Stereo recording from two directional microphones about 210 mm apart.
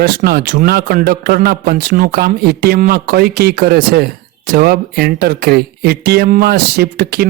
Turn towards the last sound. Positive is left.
turn(degrees=-45)  # may be behind; listen again after turning